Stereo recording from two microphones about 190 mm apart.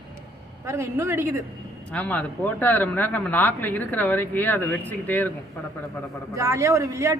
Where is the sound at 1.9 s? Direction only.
10° left (ahead or behind).